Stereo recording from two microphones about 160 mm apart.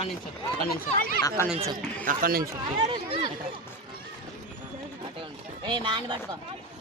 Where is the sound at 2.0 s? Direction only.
60° right (ahead or behind).